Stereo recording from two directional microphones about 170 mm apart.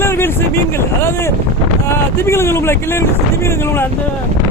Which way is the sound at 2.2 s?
15° left (ahead or behind).